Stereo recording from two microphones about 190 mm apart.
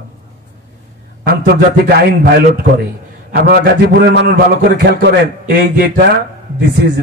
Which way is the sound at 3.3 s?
50° right (ahead or behind).